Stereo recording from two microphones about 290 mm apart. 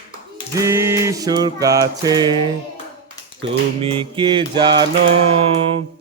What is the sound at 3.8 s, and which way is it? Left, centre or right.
Mantra, centre.